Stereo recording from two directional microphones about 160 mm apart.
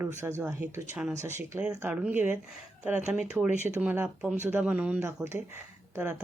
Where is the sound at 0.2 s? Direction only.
15° right (ahead or behind).